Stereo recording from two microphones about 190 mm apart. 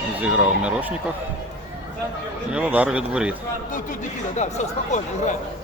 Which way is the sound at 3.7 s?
45° left (ahead or behind).